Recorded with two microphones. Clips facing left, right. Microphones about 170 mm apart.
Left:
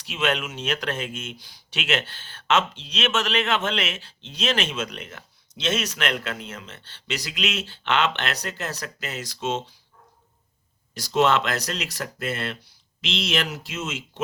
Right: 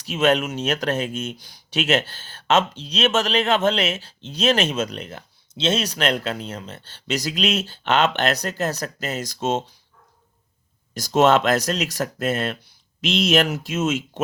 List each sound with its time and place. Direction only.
0.0 s speech: 40° right (ahead or behind)
10.9 s speech: 45° right (ahead or behind)